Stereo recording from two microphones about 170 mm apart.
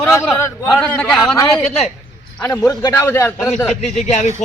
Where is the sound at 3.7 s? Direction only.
40° left (ahead or behind).